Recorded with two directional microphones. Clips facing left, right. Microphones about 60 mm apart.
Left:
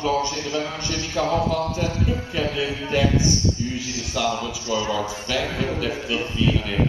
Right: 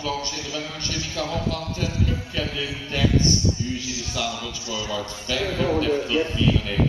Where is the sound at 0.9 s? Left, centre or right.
Left.